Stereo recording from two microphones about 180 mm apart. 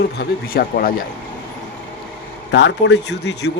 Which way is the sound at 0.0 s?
60° left (ahead or behind).